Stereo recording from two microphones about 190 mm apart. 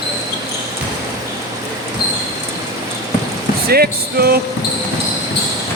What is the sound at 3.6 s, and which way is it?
Music, 55° right (ahead or behind).